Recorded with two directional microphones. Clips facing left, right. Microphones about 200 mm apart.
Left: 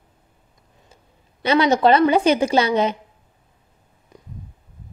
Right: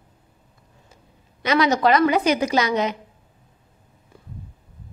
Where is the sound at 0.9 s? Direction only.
30° left (ahead or behind).